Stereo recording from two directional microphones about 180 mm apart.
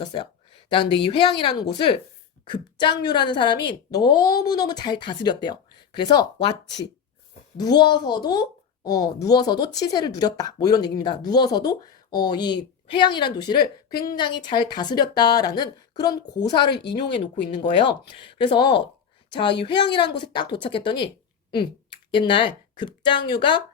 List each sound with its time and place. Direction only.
0.0 s a sound: 25° left (ahead or behind)
1.0 s a child's voice: 25° left (ahead or behind)
22.1 s speech: 25° left (ahead or behind)